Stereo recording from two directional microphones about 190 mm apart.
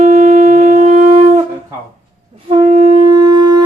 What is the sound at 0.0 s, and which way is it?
Wind instrument, 35° right (ahead or behind).